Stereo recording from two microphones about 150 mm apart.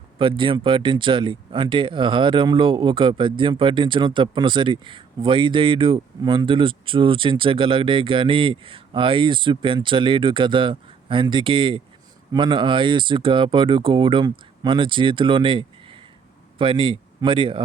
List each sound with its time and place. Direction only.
0.2 s speech: 35° right (ahead or behind)